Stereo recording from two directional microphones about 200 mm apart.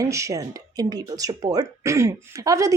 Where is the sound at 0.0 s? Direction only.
15° right (ahead or behind).